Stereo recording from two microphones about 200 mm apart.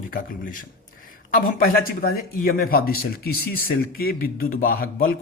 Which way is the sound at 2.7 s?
50° left (ahead or behind).